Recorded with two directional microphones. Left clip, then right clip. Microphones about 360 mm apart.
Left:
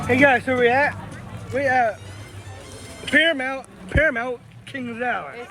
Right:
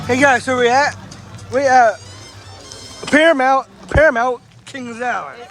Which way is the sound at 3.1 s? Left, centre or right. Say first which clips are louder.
Right 6 dB; right.